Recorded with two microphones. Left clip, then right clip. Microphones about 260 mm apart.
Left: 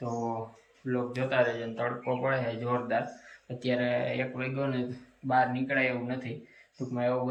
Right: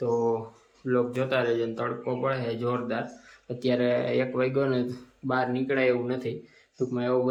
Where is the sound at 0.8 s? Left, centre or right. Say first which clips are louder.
Right 6 dB; centre.